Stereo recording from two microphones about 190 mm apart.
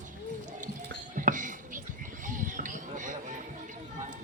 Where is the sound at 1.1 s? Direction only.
45° right (ahead or behind).